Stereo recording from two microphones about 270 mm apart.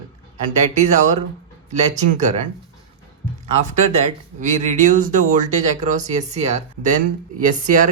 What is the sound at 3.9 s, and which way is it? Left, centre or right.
Speech, right.